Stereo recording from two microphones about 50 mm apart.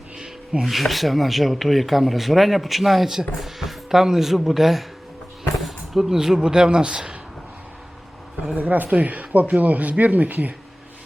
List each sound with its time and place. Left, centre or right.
0.6 s speech: centre
8.5 s speech: right